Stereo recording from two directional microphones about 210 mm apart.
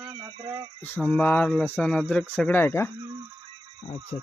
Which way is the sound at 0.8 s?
10° left (ahead or behind).